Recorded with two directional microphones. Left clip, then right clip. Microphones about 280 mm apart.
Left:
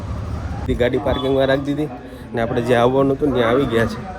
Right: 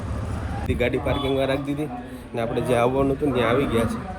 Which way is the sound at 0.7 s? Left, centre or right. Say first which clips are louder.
Left 5 dB; left.